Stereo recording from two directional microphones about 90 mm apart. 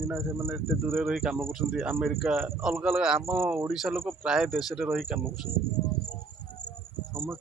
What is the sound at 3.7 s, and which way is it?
Speech, 5° right (ahead or behind).